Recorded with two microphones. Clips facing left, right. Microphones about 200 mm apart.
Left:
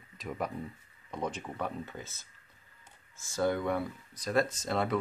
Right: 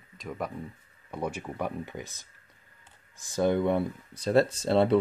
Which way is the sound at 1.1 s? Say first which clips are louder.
Right 3 dB; 10° right (ahead or behind).